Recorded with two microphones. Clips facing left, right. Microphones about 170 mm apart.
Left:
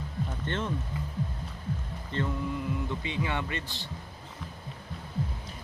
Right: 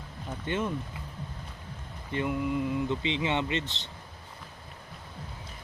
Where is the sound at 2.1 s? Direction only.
15° right (ahead or behind).